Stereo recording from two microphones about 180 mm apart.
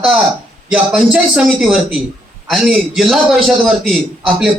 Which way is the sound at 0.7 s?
5° right (ahead or behind).